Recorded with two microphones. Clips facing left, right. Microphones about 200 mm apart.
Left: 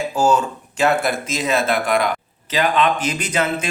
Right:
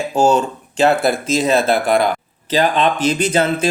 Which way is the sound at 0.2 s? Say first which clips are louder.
Right 4 dB; 25° right (ahead or behind).